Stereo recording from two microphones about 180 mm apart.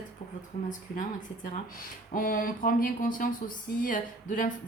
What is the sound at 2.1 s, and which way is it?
Speech, 50° left (ahead or behind).